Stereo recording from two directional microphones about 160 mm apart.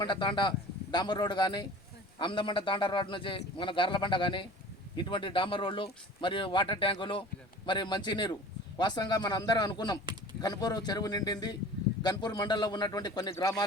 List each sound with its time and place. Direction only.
0.0 s a man's voice: 30° left (ahead or behind)